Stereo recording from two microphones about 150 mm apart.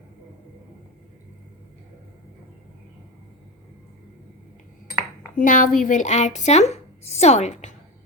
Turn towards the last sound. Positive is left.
turn(degrees=50)  # may be behind; listen again after turning